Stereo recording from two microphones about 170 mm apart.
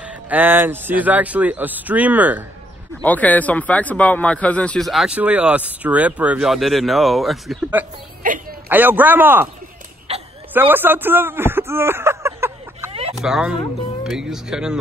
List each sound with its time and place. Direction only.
0.0 s speech: 10° right (ahead or behind)
3.0 s speech: 10° left (ahead or behind)
8.2 s a sound: 55° right (ahead or behind)
8.6 s speech: 10° right (ahead or behind)
10.1 s a sound: 35° right (ahead or behind)
10.5 s speech: 10° right (ahead or behind)
13.2 s speech: 5° right (ahead or behind)